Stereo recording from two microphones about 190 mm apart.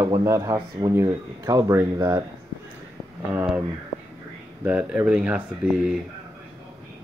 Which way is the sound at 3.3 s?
10° right (ahead or behind).